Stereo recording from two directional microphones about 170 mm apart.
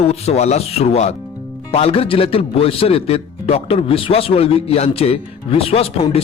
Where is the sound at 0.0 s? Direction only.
40° left (ahead or behind).